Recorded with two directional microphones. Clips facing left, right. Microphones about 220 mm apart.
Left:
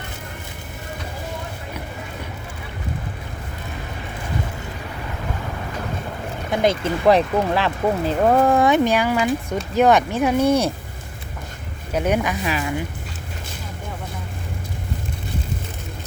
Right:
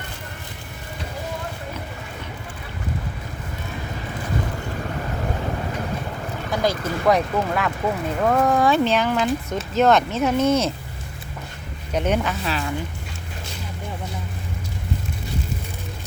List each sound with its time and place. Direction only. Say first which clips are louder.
6.5 s speech: left 4 dB; 25° left (ahead or behind)
11.9 s speech: left 1 dB; 10° left (ahead or behind)